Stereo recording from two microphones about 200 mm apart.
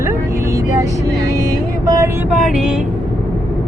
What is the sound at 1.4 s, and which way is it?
Vehicle, 15° right (ahead or behind).